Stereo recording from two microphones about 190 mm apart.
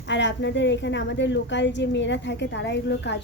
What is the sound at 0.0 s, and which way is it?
A woman's voice, 70° left (ahead or behind).